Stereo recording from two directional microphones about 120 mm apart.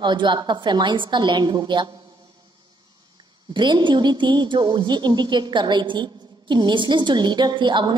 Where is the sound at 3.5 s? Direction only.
40° right (ahead or behind).